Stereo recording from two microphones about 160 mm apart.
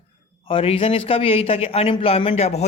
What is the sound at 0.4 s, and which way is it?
A man's voice, 35° left (ahead or behind).